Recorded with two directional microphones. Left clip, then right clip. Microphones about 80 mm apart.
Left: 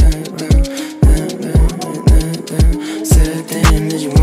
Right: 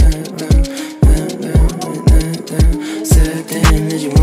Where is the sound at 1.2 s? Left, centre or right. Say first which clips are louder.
Even; left.